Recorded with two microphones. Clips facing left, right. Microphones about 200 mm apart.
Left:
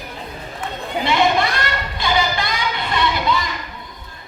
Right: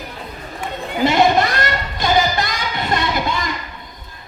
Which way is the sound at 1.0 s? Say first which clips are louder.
Right 3 dB; 45° right (ahead or behind).